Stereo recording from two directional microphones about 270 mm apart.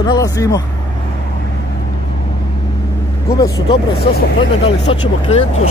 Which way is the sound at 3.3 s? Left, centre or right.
Centre.